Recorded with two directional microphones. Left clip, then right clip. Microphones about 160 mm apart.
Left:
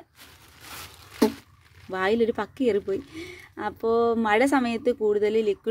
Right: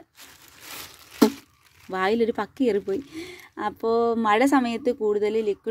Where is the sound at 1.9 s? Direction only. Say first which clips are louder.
Right 1 dB; 20° right (ahead or behind).